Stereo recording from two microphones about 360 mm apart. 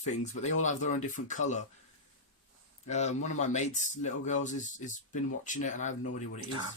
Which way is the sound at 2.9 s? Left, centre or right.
Centre.